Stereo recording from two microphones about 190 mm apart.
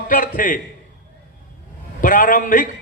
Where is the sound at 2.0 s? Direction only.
45° left (ahead or behind).